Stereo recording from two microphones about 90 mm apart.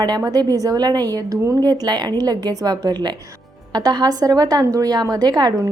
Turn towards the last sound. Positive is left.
turn(degrees=-45)  # may be behind; listen again after turning